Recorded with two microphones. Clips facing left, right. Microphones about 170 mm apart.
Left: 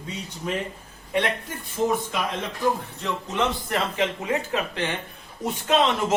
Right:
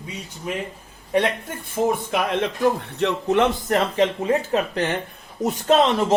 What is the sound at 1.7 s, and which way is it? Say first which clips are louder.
Speech: right 3 dB; 60° right (ahead or behind).